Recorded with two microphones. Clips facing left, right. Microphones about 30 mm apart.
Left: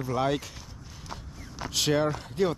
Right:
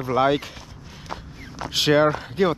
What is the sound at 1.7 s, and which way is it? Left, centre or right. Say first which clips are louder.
Speech: right 8 dB; right.